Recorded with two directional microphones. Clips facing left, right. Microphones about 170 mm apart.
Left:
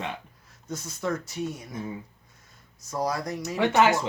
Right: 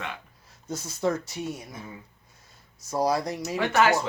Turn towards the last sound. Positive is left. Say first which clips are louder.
# left 1 dB
turn(degrees=20)  # may be behind; listen again after turning